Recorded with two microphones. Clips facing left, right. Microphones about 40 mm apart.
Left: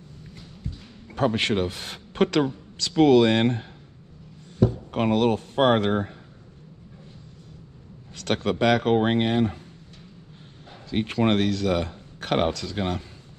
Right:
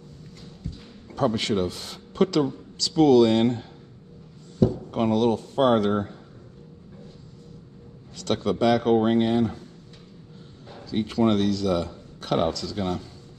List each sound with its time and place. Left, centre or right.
0.7 s a sound: left
1.1 s speech: left
4.6 s a sound: centre
4.9 s speech: left
8.1 s speech: left
10.9 s speech: left